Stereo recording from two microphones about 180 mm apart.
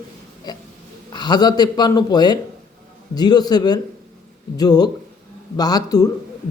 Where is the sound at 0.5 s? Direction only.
20° left (ahead or behind).